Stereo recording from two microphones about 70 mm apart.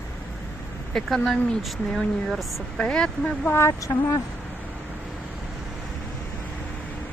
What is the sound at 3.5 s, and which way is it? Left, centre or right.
Speech, left.